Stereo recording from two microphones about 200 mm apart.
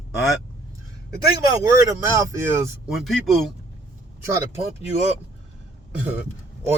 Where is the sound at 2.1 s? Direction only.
15° right (ahead or behind).